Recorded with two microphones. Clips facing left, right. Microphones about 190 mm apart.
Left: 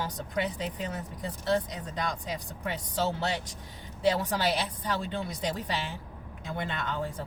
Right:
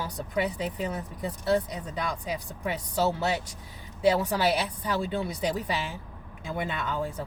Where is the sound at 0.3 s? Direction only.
10° right (ahead or behind).